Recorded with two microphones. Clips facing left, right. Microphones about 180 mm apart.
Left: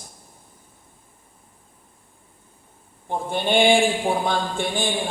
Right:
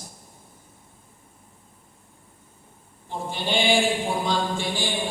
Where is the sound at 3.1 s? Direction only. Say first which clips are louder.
Left 5 dB; 55° left (ahead or behind).